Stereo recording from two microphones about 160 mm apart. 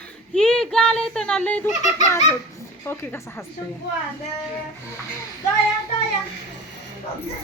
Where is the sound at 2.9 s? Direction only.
15° left (ahead or behind).